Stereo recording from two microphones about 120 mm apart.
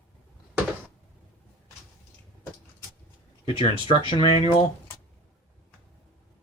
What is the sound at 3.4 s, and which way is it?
Speech, 50° left (ahead or behind).